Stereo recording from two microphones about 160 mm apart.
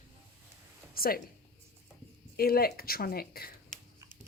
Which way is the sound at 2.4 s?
70° left (ahead or behind).